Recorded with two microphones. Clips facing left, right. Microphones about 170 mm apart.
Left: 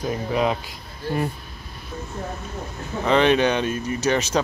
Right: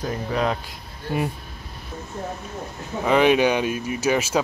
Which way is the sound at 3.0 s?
10° right (ahead or behind).